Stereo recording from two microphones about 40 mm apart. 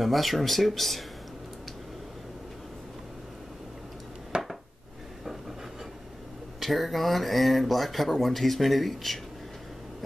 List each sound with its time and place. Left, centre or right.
0.0 s speech: centre
4.3 s dishes: right
6.6 s speech: centre